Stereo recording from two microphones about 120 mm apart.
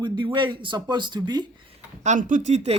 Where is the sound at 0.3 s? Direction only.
40° right (ahead or behind).